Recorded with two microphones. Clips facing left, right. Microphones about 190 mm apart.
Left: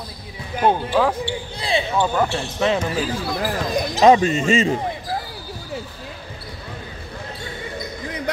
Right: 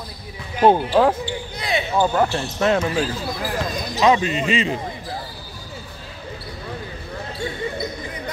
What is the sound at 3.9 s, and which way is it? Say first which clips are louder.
Speech: left 4 dB; 40° left (ahead or behind).